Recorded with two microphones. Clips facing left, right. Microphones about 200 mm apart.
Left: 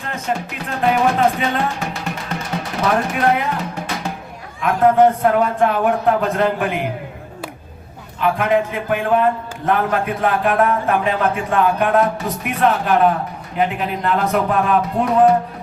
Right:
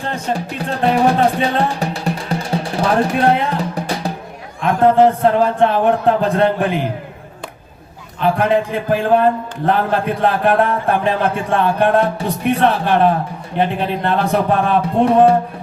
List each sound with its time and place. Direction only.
0.0 s music: 35° right (ahead or behind)
4.6 s a man's voice: 30° right (ahead or behind)
8.2 s a man's voice: 30° right (ahead or behind)